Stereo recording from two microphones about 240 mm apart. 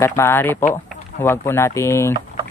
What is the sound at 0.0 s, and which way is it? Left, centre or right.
Speech, centre.